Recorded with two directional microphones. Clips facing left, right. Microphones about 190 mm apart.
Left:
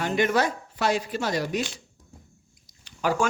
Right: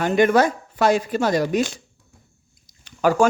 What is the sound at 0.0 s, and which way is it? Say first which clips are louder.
Speech: right 7 dB; 50° right (ahead or behind).